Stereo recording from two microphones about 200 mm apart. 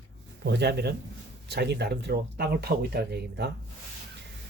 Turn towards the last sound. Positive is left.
turn(degrees=-55)  # may be behind; listen again after turning